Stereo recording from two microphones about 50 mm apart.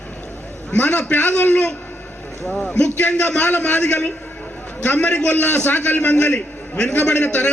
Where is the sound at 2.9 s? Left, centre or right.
Left.